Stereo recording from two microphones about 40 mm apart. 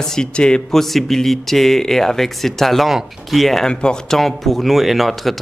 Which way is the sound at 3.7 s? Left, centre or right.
Left.